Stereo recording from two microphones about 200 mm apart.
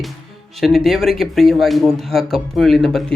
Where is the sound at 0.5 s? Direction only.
Centre (ahead or behind).